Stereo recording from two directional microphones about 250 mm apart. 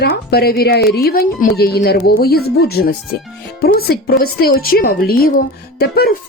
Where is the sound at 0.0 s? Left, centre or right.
Left.